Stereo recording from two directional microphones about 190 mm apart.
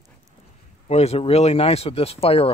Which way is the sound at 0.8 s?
35° left (ahead or behind).